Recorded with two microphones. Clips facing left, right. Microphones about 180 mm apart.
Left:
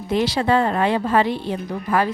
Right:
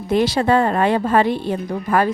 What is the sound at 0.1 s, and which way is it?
A woman's voice, 50° right (ahead or behind).